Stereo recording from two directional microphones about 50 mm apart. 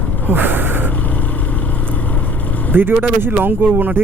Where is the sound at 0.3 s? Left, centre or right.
Right.